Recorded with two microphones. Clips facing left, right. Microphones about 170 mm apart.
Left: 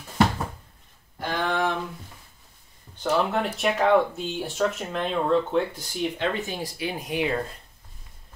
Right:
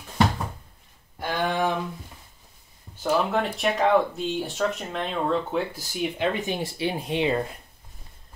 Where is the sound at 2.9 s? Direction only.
Centre (ahead or behind).